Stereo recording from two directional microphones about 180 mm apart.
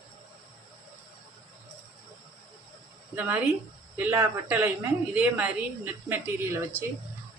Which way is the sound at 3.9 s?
10° right (ahead or behind).